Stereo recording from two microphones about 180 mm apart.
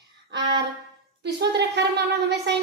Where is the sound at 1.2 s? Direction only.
75° right (ahead or behind).